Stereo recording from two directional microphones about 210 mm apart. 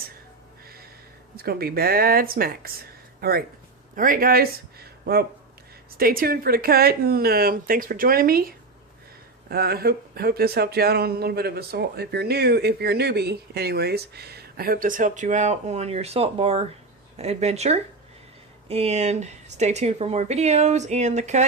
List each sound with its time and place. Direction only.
1.4 s speech: 45° right (ahead or behind)